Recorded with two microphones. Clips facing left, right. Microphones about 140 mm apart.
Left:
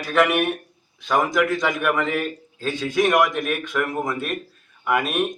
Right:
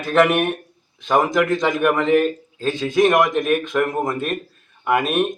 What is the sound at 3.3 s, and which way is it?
Speech, centre (ahead or behind).